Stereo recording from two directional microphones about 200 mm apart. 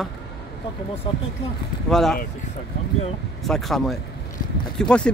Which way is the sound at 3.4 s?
Centre (ahead or behind).